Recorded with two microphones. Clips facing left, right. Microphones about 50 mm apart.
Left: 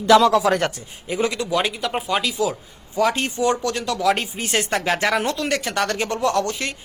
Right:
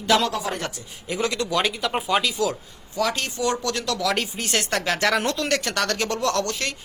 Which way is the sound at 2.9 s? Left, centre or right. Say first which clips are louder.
Left 4 dB; left.